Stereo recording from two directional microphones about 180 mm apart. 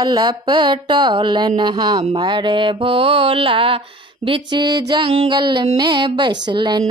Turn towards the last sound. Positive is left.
turn(degrees=-25)  # may be behind; listen again after turning